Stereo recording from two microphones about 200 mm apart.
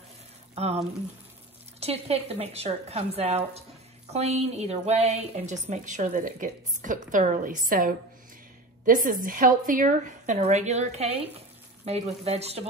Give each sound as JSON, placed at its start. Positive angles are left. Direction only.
{"t": 0.6, "sound": "a woman's voice", "side_deg": -30}